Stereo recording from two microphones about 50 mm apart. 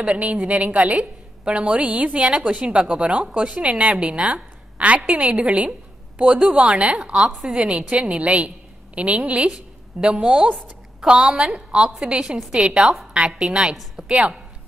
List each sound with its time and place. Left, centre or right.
0.0 s a woman's voice: right
9.5 s a sound: centre
10.2 s a woman's voice: centre